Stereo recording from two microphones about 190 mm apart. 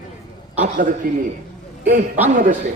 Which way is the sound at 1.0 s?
50° right (ahead or behind).